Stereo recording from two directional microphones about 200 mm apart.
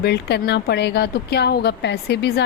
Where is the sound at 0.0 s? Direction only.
55° left (ahead or behind).